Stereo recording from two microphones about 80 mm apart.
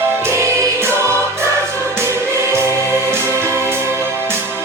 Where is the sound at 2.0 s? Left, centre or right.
Right.